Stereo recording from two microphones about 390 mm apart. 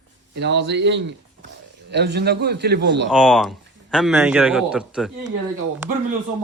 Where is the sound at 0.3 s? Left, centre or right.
Right.